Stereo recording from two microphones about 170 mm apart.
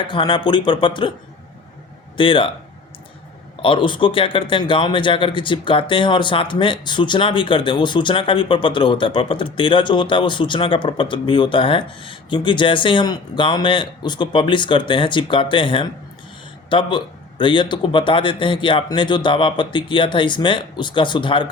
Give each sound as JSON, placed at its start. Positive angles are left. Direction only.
{"t": 0.0, "sound": "a man's voice", "side_deg": 30}
{"t": 2.1, "sound": "speech", "side_deg": 30}
{"t": 3.6, "sound": "a man's voice", "side_deg": 30}